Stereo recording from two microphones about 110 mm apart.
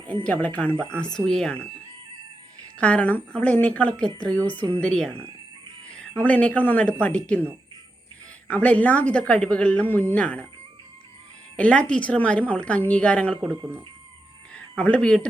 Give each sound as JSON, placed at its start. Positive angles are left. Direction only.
{"t": 0.1, "sound": "a woman's voice", "side_deg": 15}
{"t": 2.7, "sound": "a woman's voice", "side_deg": 10}
{"t": 6.2, "sound": "a woman's voice", "side_deg": 15}
{"t": 8.4, "sound": "a woman's voice", "side_deg": 15}
{"t": 11.5, "sound": "a woman's voice", "side_deg": 10}
{"t": 13.5, "sound": "speech", "side_deg": -20}
{"t": 14.5, "sound": "speech", "side_deg": 10}